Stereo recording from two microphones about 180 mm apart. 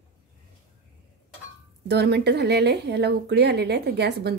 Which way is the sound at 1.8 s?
65° right (ahead or behind).